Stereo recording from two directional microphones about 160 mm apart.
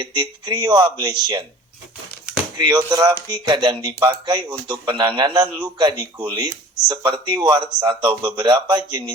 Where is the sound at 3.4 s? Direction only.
30° right (ahead or behind).